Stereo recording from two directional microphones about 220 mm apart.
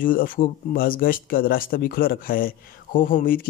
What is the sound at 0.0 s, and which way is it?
Speech, 40° left (ahead or behind).